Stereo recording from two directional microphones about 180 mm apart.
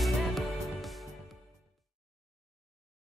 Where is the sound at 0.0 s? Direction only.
Centre (ahead or behind).